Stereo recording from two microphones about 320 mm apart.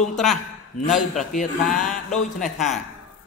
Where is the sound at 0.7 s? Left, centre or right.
Left.